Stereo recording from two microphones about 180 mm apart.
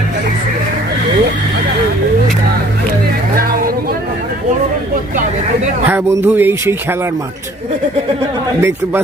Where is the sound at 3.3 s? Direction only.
55° right (ahead or behind).